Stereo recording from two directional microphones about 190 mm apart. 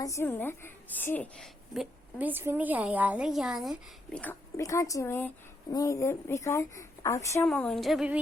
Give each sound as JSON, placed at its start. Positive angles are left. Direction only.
{"t": 0.0, "sound": "a woman's voice", "side_deg": 15}
{"t": 7.4, "sound": "a woman's voice", "side_deg": 5}